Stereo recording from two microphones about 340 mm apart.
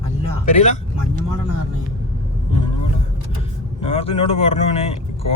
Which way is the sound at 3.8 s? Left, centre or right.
Centre.